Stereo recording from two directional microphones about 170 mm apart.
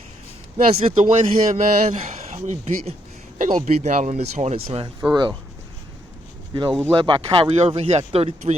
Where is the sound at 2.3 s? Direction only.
45° right (ahead or behind).